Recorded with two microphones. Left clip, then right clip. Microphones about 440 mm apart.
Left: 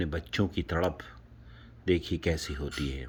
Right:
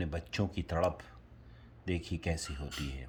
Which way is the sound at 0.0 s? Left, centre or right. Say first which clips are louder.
Left 6 dB; centre.